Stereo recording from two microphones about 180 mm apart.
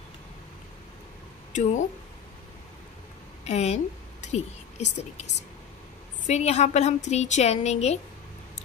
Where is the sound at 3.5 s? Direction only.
35° left (ahead or behind).